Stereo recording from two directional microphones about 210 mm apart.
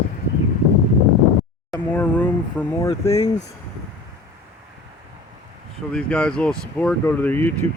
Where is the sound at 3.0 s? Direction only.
30° left (ahead or behind).